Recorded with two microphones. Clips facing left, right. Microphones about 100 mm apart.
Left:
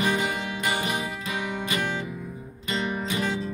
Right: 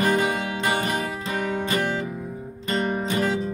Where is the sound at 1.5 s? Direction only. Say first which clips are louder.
Right 5 dB; 40° right (ahead or behind).